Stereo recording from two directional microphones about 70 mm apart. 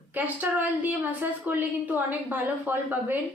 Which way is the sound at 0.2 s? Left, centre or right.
Right.